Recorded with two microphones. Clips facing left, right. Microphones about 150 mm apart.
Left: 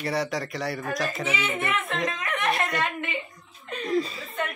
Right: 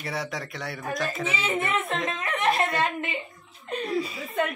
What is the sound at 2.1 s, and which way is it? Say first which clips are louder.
Speech: right 2 dB; 30° right (ahead or behind).